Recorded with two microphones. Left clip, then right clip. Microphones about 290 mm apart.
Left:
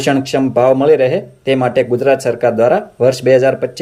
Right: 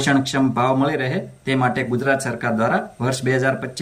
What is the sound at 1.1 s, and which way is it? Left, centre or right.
Speech, left.